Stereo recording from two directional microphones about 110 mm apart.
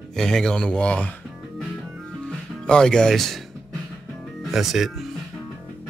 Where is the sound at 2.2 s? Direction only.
5° left (ahead or behind).